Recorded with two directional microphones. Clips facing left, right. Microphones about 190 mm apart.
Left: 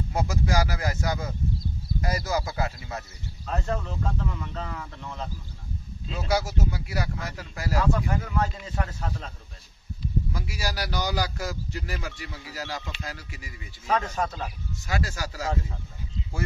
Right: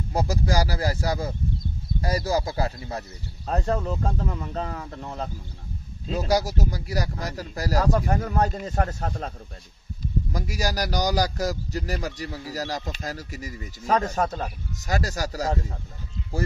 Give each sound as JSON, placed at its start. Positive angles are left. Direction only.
{"t": 0.1, "sound": "a man's voice", "side_deg": -35}
{"t": 10.3, "sound": "a man's voice", "side_deg": -40}